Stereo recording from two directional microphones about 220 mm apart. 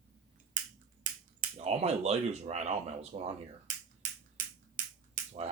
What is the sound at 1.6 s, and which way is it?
Speech, 30° right (ahead or behind).